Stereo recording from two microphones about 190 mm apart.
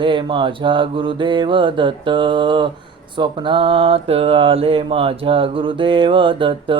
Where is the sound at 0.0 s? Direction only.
25° right (ahead or behind).